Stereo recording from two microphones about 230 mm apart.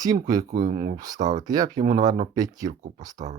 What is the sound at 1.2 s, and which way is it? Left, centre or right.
Speech, right.